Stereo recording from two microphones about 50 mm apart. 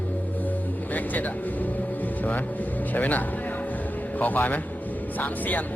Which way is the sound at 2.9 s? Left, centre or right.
Left.